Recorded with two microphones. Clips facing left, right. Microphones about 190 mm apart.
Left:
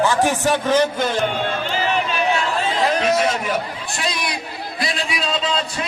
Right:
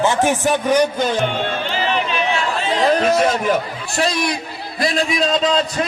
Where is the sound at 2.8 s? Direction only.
40° right (ahead or behind).